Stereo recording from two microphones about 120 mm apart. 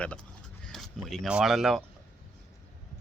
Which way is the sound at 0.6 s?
Centre (ahead or behind).